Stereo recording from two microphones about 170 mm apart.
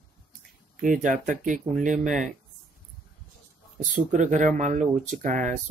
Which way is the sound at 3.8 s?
50° right (ahead or behind).